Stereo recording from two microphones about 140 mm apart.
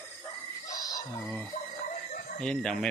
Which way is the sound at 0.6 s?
25° left (ahead or behind).